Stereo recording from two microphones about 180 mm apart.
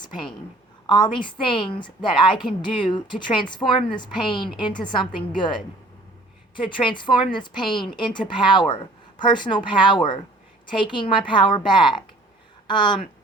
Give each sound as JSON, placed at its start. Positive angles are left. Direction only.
{"t": 0.0, "sound": "a woman's voice", "side_deg": 25}